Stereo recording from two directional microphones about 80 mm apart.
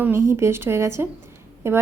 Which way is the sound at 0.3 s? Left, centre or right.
Right.